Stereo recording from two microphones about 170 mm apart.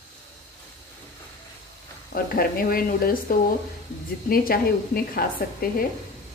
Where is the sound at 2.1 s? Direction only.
60° left (ahead or behind).